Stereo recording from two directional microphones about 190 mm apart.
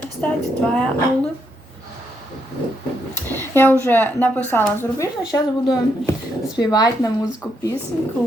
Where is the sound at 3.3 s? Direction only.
10° left (ahead or behind).